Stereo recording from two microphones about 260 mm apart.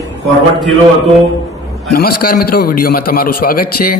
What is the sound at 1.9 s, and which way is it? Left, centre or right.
A man's voice, left.